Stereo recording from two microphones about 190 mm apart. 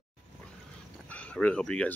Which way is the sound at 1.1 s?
5° left (ahead or behind).